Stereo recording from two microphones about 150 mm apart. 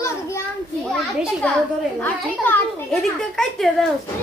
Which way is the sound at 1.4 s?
10° left (ahead or behind).